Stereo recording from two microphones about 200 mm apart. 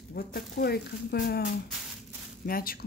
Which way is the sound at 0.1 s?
50° left (ahead or behind).